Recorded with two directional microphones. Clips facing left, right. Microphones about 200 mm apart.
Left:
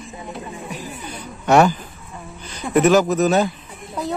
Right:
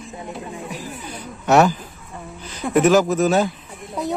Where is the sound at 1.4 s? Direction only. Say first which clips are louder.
Left 1 dB; centre (ahead or behind).